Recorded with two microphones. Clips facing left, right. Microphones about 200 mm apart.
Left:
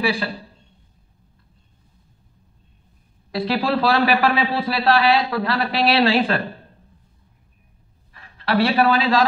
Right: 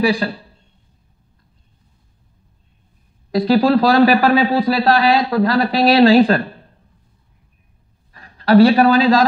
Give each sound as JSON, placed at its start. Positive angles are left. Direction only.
{"t": 0.0, "sound": "a man's voice", "side_deg": -40}
{"t": 3.3, "sound": "a man's voice", "side_deg": -40}
{"t": 8.1, "sound": "a woman's voice", "side_deg": -40}